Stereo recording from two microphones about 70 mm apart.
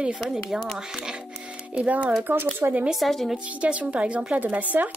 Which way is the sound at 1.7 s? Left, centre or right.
Right.